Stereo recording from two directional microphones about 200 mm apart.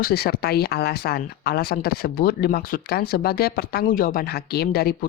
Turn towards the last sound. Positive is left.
turn(degrees=50)  # may be behind; listen again after turning